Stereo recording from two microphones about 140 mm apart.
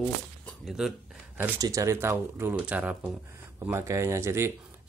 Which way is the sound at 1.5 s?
25° right (ahead or behind).